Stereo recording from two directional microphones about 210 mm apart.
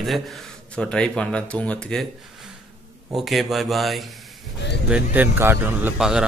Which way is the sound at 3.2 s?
Centre (ahead or behind).